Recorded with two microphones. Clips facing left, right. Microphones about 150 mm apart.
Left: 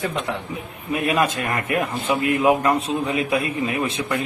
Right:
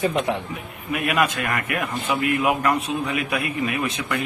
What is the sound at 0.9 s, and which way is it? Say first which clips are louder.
A man's voice: left 2 dB; 25° left (ahead or behind).